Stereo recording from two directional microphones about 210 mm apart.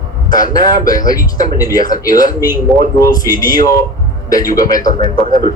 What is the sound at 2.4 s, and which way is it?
Speech, 10° right (ahead or behind).